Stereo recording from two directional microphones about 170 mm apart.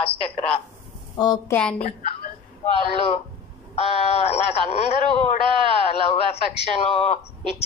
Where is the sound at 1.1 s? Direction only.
20° left (ahead or behind).